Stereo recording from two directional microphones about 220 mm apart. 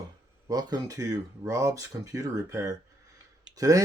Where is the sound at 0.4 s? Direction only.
15° right (ahead or behind).